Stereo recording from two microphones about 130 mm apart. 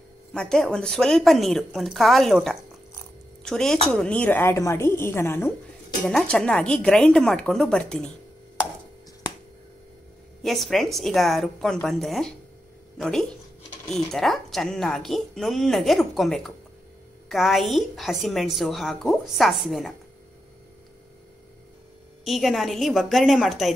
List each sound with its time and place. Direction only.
0.3 s speech: 5° left (ahead or behind)
3.4 s a woman's voice: 5° left (ahead or behind)
6.0 s a woman's voice: 5° left (ahead or behind)
10.4 s speech: centre (ahead or behind)
22.2 s speech: centre (ahead or behind)